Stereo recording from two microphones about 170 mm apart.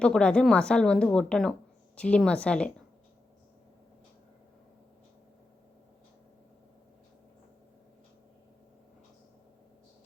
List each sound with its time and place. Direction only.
0.0 s a woman's voice: 5° left (ahead or behind)